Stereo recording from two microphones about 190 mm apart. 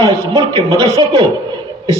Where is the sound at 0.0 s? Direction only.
20° right (ahead or behind).